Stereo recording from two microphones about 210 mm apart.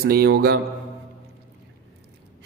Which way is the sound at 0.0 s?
50° right (ahead or behind).